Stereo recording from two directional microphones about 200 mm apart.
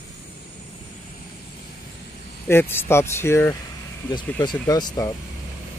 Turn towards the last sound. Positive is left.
turn(degrees=20)  # may be behind; listen again after turning